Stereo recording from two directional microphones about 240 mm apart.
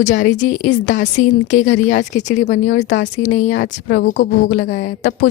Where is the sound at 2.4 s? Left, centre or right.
Left.